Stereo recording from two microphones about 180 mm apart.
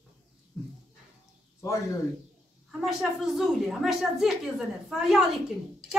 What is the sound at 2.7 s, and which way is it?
A woman's voice, centre (ahead or behind).